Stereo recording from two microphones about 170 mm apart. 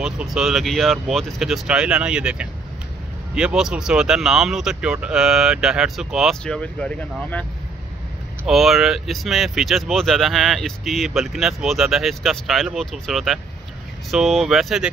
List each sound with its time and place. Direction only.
0.0 s speech: 5° right (ahead or behind)
8.5 s speech: centre (ahead or behind)